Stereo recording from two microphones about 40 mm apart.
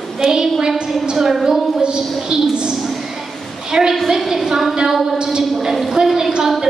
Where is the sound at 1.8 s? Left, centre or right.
Right.